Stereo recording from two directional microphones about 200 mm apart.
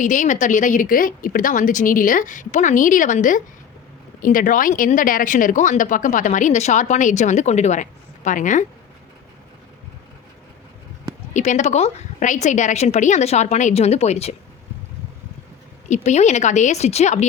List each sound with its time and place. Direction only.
0.0 s speech: 40° left (ahead or behind)
11.3 s speech: 35° left (ahead or behind)
15.9 s speech: 35° left (ahead or behind)